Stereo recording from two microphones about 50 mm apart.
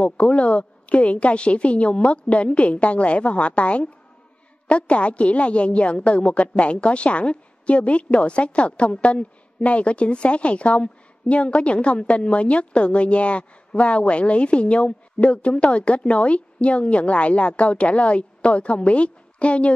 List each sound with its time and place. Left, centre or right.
0.0 s a woman's voice: left